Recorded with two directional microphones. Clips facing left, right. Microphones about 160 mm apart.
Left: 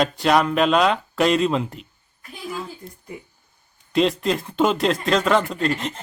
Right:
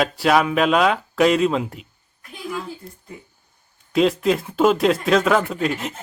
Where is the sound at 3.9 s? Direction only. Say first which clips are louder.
Right 2 dB; 5° right (ahead or behind).